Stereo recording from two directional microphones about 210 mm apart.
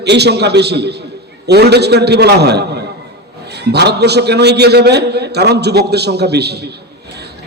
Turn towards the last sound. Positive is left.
turn(degrees=-50)  # may be behind; listen again after turning